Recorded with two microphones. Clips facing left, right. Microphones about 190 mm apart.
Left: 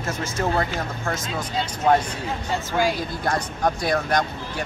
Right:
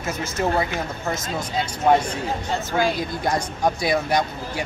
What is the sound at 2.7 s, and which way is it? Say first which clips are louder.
Speech: even; 10° left (ahead or behind).